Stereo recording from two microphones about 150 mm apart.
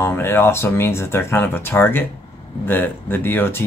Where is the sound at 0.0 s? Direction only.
15° left (ahead or behind).